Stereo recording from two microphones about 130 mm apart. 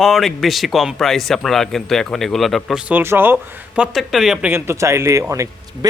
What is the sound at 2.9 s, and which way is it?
Speech, 15° right (ahead or behind).